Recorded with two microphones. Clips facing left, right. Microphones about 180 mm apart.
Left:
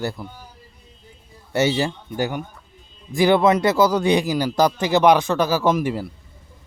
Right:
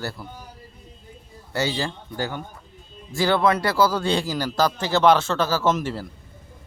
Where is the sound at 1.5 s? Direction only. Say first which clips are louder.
Left 6 dB; 20° left (ahead or behind).